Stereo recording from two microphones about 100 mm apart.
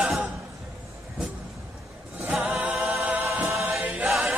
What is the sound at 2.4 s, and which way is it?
Choir, 15° right (ahead or behind).